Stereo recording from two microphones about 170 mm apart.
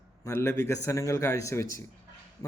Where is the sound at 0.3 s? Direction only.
15° left (ahead or behind).